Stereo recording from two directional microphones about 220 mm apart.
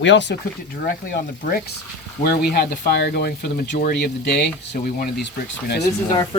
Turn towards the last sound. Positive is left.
turn(degrees=25)  # may be behind; listen again after turning